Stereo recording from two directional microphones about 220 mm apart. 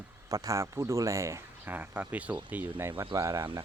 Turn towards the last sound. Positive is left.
turn(degrees=-10)  # may be behind; listen again after turning